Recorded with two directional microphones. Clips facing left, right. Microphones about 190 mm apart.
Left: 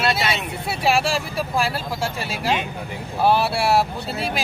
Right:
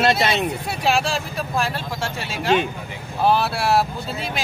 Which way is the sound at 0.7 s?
5° left (ahead or behind).